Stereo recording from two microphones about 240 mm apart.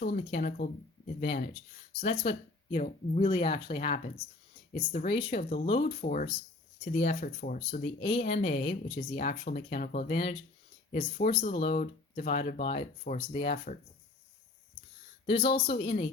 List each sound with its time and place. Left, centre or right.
0.0 s speech: left
0.3 s speech: left
8.0 s speech: left
9.1 s speech: left
15.3 s speech: left